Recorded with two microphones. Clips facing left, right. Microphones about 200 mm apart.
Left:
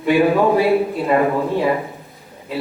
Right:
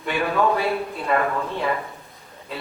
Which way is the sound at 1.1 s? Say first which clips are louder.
Left 5 dB; 15° left (ahead or behind).